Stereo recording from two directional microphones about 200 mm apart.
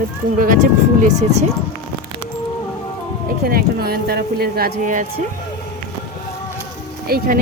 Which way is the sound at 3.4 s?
50° right (ahead or behind).